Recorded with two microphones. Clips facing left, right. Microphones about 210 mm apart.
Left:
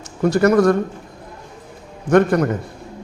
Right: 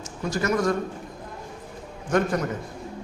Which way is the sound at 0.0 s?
60° left (ahead or behind).